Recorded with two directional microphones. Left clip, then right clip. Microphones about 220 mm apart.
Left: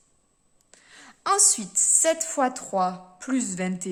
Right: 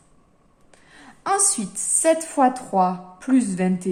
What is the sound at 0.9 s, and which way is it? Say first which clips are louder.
A woman's voice: right 1 dB; 35° left (ahead or behind).